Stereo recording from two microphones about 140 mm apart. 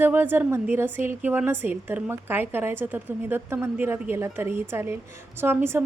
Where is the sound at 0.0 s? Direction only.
15° right (ahead or behind).